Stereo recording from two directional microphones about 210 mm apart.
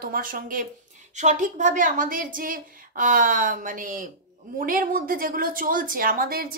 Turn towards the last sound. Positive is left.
turn(degrees=-45)  # may be behind; listen again after turning